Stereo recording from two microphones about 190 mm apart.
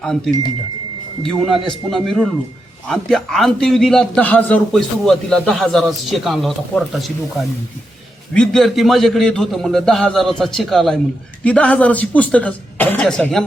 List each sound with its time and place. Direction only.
1.2 s a man's voice: centre (ahead or behind)